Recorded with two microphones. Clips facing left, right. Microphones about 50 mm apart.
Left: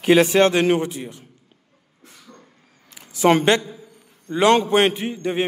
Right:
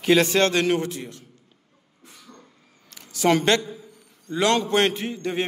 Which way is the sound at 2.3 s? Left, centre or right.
Centre.